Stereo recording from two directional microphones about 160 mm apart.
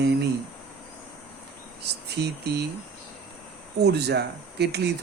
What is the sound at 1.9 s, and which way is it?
Speech, 90° right.